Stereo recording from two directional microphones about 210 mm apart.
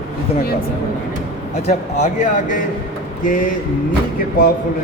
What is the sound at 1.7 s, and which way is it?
Speech, 35° left (ahead or behind).